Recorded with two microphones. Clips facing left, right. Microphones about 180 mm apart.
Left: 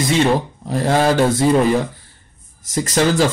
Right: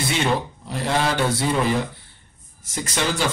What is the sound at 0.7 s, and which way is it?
Speech, 40° left (ahead or behind).